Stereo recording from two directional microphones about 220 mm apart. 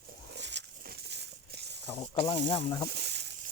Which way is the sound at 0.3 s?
50° right (ahead or behind).